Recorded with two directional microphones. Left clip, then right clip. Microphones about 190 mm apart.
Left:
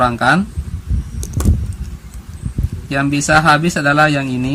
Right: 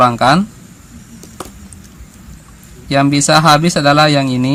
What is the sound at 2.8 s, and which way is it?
Speech, 35° right (ahead or behind).